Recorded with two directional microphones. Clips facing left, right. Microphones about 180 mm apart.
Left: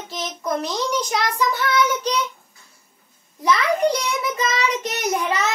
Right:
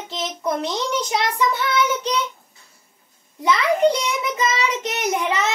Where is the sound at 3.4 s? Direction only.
25° right (ahead or behind).